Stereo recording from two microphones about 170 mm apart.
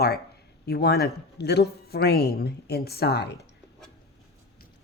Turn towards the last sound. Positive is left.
turn(degrees=75)  # may be behind; listen again after turning